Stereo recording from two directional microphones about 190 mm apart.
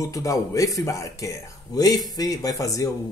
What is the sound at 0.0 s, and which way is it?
Speech, 15° left (ahead or behind).